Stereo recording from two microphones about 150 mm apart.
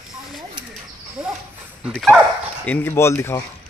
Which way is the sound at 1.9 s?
5° left (ahead or behind).